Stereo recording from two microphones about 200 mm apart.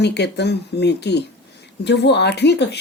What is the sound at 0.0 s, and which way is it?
Speech, 60° left (ahead or behind).